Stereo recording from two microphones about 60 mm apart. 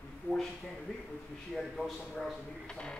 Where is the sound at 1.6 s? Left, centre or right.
Centre.